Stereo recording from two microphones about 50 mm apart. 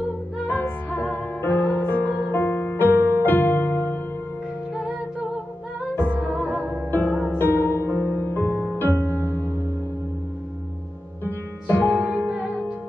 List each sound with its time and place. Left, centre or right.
0.4 s music: left
2.3 s music: left
4.7 s music: right
5.9 s music: left
6.2 s music: right
6.6 s music: left
7.2 s music: left
11.2 s music: left